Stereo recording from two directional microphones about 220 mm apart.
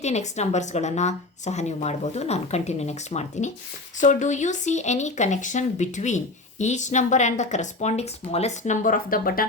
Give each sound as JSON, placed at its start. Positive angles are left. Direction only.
{"t": 0.0, "sound": "speech", "side_deg": 30}